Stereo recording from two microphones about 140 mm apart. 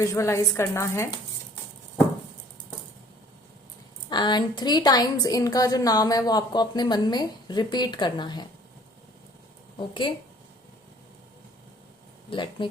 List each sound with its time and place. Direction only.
0.0 s a woman's voice: 20° left (ahead or behind)
4.1 s a woman's voice: 30° left (ahead or behind)
9.7 s speech: 35° left (ahead or behind)
12.3 s speech: 35° left (ahead or behind)